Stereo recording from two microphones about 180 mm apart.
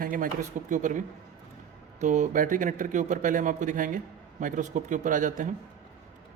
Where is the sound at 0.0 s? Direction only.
50° right (ahead or behind).